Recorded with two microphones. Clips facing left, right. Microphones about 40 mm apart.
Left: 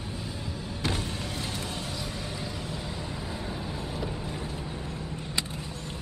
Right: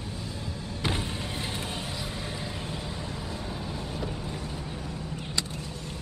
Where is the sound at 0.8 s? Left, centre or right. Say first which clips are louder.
Right 1 dB; centre.